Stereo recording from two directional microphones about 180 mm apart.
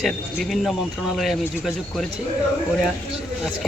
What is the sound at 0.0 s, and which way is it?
Speech, centre (ahead or behind).